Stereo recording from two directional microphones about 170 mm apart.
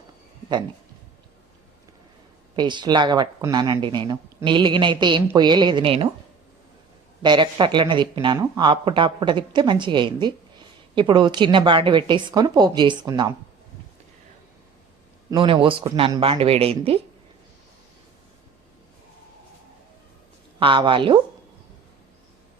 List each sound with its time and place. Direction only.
2.6 s a woman's voice: 25° right (ahead or behind)
7.2 s a woman's voice: 25° right (ahead or behind)
15.3 s speech: 30° right (ahead or behind)
20.6 s a woman's voice: 30° right (ahead or behind)